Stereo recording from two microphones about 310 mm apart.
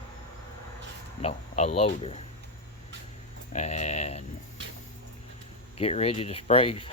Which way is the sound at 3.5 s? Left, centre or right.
Left.